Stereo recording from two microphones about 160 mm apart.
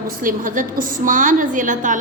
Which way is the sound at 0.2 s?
60° right (ahead or behind).